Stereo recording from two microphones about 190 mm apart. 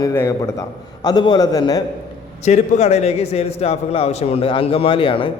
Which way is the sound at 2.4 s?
40° left (ahead or behind).